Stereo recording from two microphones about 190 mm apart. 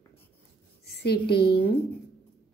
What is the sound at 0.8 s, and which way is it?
Speech, 55° left (ahead or behind).